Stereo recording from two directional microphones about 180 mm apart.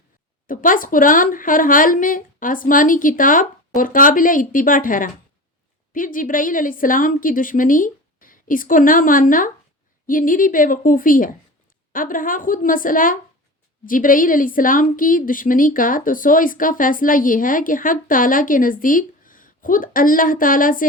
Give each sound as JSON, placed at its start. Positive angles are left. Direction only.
{"t": 0.4, "sound": "a woman's voice", "side_deg": 50}